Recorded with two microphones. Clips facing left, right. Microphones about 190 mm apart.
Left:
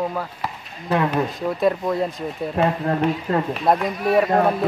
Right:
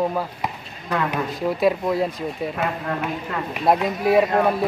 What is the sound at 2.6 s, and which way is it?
Speech, 35° left (ahead or behind).